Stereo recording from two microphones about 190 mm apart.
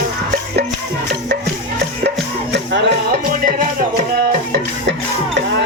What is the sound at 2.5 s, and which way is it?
Music, 65° right (ahead or behind).